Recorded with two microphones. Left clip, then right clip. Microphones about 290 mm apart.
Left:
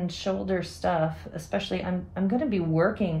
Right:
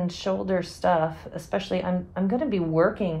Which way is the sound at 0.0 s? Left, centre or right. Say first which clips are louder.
Right 2 dB; centre.